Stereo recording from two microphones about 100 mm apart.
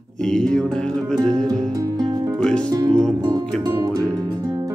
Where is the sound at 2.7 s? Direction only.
40° right (ahead or behind).